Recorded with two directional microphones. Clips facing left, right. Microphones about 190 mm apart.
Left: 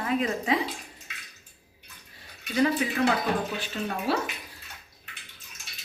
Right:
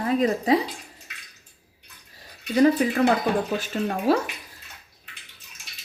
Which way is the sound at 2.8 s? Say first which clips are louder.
Right 5 dB; 45° right (ahead or behind).